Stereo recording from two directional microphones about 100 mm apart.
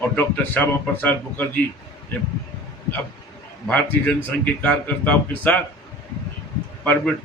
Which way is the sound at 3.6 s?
15° left (ahead or behind).